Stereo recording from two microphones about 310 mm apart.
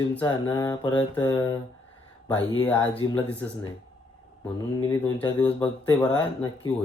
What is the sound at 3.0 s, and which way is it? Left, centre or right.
Speech, left.